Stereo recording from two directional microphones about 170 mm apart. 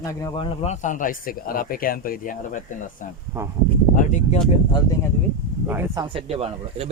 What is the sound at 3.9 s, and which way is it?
Speech, 45° left (ahead or behind).